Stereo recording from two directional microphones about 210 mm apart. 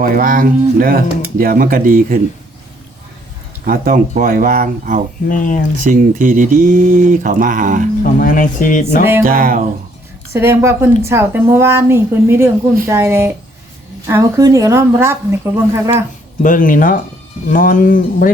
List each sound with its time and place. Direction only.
0.0 s speech: 40° right (ahead or behind)
3.7 s speech: 40° right (ahead or behind)
5.3 s speech: 40° left (ahead or behind)
5.8 s speech: 35° right (ahead or behind)
8.0 s speech: 40° left (ahead or behind)
9.2 s speech: 45° right (ahead or behind)
10.3 s speech: 10° right (ahead or behind)
16.4 s speech: 40° left (ahead or behind)